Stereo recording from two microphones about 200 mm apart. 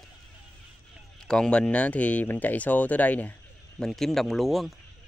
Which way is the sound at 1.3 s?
5° left (ahead or behind).